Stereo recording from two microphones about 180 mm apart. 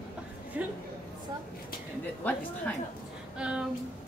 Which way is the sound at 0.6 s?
10° right (ahead or behind).